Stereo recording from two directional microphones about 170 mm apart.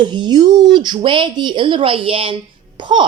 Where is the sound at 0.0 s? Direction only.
25° right (ahead or behind).